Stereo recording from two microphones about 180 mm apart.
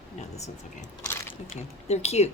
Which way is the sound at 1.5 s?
35° left (ahead or behind).